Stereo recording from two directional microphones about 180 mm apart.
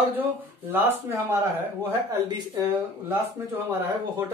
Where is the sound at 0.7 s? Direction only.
10° right (ahead or behind).